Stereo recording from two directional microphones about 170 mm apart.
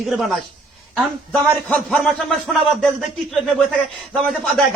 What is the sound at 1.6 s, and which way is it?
Speech, 5° left (ahead or behind).